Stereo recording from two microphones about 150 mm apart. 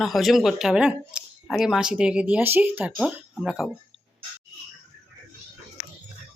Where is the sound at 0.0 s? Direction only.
Centre (ahead or behind).